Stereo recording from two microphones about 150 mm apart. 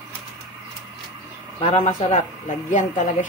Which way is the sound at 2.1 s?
55° left (ahead or behind).